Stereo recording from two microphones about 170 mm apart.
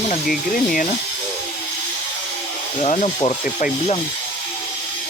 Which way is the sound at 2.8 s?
40° left (ahead or behind).